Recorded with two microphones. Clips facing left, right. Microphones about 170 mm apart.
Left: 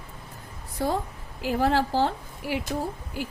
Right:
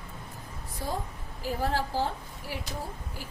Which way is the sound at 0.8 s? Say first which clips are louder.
Left 8 dB; 70° left (ahead or behind).